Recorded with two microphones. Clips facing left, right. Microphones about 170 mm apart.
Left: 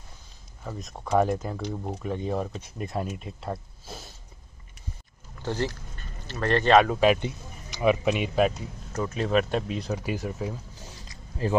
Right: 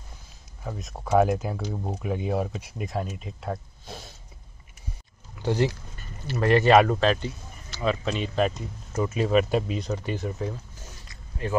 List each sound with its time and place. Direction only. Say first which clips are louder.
0.7 s speech: right 2 dB; 5° right (ahead or behind)
5.4 s speech: right 5 dB; 15° right (ahead or behind)
7.0 s speech: left 2 dB; 15° left (ahead or behind)
8.9 s speech: right 2 dB; 5° right (ahead or behind)
11.4 s speech: left 2 dB; 35° left (ahead or behind)